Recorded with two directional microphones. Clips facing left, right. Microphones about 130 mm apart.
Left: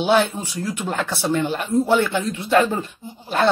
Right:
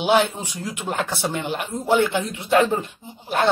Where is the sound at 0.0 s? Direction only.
15° right (ahead or behind).